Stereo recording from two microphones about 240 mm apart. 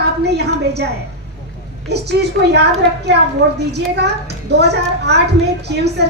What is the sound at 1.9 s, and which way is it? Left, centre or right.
Speech, right.